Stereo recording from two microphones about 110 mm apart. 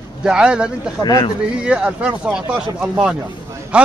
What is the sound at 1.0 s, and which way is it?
Speech, 35° left (ahead or behind).